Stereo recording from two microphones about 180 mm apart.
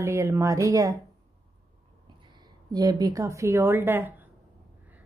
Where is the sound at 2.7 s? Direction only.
20° right (ahead or behind).